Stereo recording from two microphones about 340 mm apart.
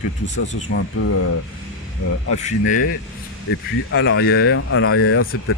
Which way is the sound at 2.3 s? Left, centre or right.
Left.